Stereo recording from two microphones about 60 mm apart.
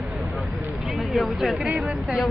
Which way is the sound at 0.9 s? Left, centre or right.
Centre.